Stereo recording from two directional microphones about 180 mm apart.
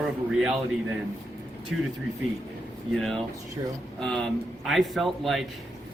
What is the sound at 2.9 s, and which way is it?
Speech, centre (ahead or behind).